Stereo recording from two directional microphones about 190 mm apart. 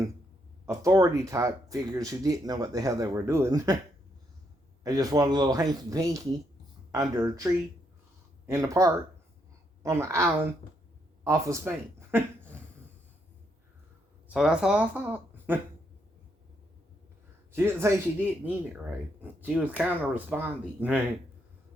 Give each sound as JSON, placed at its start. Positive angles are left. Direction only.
{"t": 0.6, "sound": "speech", "side_deg": -15}
{"t": 4.8, "sound": "speech", "side_deg": -20}
{"t": 14.3, "sound": "speech", "side_deg": -5}
{"t": 17.5, "sound": "speech", "side_deg": -10}